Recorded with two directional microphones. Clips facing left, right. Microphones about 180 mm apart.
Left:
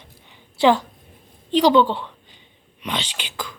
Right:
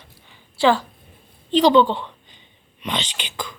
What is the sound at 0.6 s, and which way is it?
A woman's voice, 20° left (ahead or behind).